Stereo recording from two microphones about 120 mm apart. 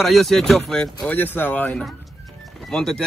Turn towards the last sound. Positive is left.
turn(degrees=5)  # may be behind; listen again after turning